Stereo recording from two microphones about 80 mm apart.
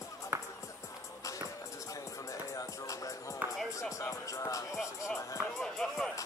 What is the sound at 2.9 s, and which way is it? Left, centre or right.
Music, left.